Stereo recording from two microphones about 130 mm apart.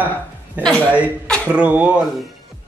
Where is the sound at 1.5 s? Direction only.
10° right (ahead or behind).